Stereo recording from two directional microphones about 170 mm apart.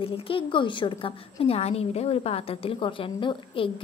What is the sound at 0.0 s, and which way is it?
A woman's voice, 30° left (ahead or behind).